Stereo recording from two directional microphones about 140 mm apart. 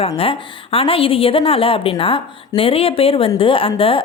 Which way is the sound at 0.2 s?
40° left (ahead or behind).